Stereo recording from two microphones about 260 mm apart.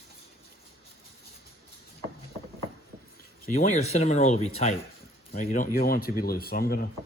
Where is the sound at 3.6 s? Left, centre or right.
Left.